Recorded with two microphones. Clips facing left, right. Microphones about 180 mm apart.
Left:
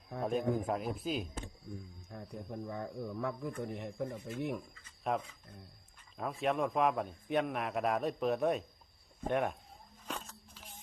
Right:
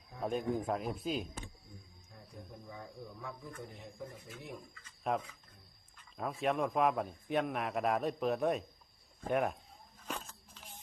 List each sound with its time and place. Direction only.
0.2 s a man's voice: centre (ahead or behind)
2.0 s speech: 65° left (ahead or behind)
5.1 s a man's voice: centre (ahead or behind)
10.1 s a sound: centre (ahead or behind)